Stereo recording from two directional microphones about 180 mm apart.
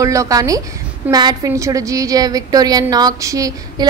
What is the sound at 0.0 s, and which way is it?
A woman's voice, 15° right (ahead or behind).